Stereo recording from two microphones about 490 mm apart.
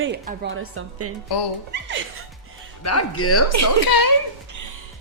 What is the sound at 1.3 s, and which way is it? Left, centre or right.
Speech, left.